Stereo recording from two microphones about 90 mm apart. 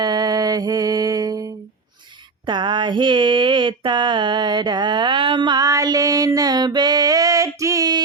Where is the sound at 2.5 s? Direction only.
60° right (ahead or behind).